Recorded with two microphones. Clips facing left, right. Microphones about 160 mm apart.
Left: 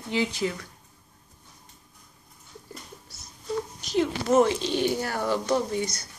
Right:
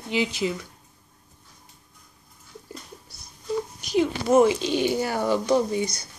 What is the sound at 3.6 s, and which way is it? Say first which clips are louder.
Speech: right 2 dB; 10° right (ahead or behind).